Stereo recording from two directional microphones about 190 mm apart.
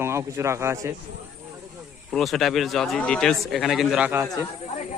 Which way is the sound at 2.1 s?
Centre (ahead or behind).